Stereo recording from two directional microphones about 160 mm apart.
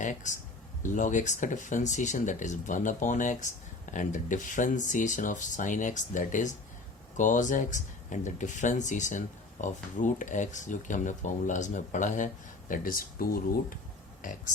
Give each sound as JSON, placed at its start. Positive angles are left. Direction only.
{"t": 0.0, "sound": "speech", "side_deg": 50}
{"t": 14.2, "sound": "speech", "side_deg": 55}